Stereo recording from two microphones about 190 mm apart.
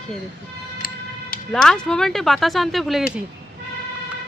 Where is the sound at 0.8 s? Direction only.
50° left (ahead or behind).